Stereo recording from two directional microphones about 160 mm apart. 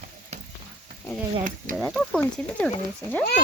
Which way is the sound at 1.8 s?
5° left (ahead or behind).